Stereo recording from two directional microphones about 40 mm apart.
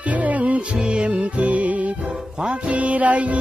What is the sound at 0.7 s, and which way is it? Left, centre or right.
Music, right.